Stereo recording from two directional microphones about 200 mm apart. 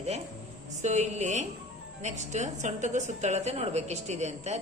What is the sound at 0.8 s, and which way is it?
A woman's voice, 35° right (ahead or behind).